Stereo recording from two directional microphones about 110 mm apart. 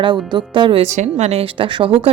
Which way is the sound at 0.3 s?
45° right (ahead or behind).